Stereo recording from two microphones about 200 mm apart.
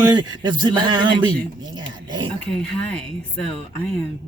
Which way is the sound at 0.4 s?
20° right (ahead or behind).